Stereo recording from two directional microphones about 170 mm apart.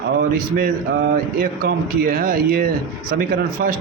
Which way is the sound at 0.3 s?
60° right (ahead or behind).